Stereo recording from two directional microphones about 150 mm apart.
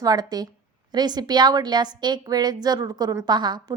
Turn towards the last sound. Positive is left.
turn(degrees=-30)  # may be behind; listen again after turning